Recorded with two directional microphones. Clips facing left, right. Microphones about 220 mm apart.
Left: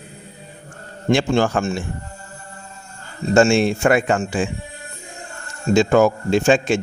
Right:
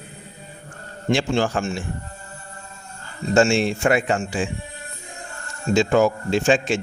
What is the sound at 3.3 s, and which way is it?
Speech, 50° left (ahead or behind).